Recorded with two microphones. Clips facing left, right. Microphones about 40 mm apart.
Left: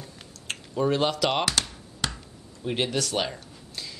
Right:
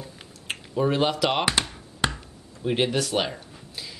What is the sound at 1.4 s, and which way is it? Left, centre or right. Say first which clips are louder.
Computer keyboard: right 2 dB; right.